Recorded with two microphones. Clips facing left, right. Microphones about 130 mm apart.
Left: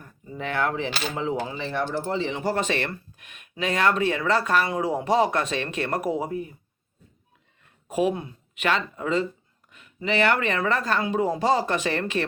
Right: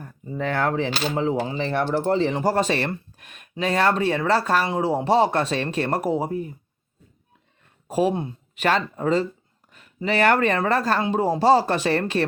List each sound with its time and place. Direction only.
0.0 s speech: 40° right (ahead or behind)
1.7 s speech: 60° right (ahead or behind); by 6.5 s 30° right (ahead or behind)
7.9 s speech: 35° right (ahead or behind)